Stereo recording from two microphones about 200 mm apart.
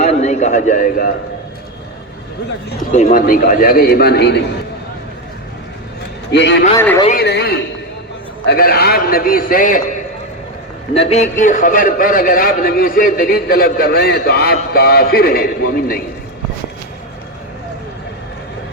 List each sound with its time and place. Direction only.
0.0 s a sound: 35° left (ahead or behind)
2.9 s a man's voice: 40° left (ahead or behind); by 4.4 s 55° left (ahead or behind)
6.3 s a man's voice: 60° left (ahead or behind)
6.7 s speech: 15° left (ahead or behind)
7.1 s a man's voice: 55° left (ahead or behind)
10.9 s a man's voice: 30° left (ahead or behind); by 16.0 s 50° left (ahead or behind)